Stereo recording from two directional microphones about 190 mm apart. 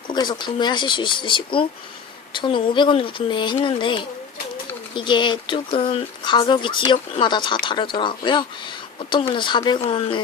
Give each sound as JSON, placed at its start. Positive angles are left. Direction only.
{"t": 0.1, "sound": "speech", "side_deg": 25}